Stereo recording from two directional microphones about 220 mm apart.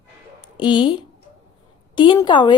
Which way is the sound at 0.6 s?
20° left (ahead or behind).